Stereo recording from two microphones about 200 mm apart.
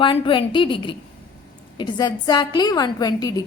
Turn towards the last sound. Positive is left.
turn(degrees=20)  # may be behind; listen again after turning